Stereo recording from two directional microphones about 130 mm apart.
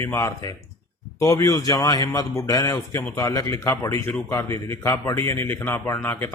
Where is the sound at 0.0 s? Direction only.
20° left (ahead or behind).